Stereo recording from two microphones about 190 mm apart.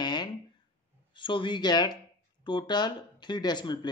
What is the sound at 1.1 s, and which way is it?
Speech, 25° left (ahead or behind).